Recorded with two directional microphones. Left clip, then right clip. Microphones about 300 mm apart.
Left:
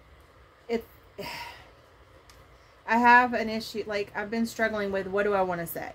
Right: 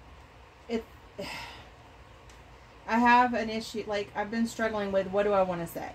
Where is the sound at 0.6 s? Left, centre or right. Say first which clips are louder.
Left 3 dB; left.